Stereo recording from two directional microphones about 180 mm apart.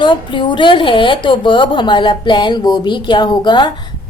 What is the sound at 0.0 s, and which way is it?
A woman's voice, 25° left (ahead or behind).